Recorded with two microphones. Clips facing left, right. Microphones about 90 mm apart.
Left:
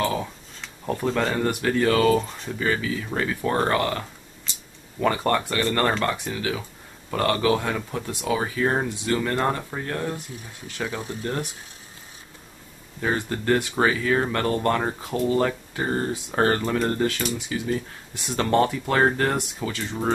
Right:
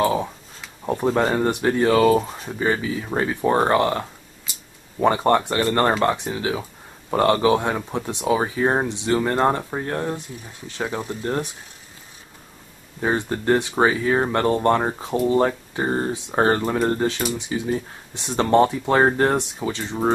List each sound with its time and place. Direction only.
0.0 s speech: 25° right (ahead or behind)
2.1 s speech: 10° right (ahead or behind)
2.6 s speech: 25° right (ahead or behind)
4.5 s a sound: 10° right (ahead or behind)
5.0 s speech: 25° right (ahead or behind)
13.0 s speech: 25° right (ahead or behind)